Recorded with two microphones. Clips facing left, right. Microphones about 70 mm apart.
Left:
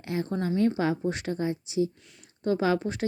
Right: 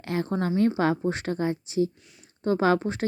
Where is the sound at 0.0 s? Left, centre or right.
Right.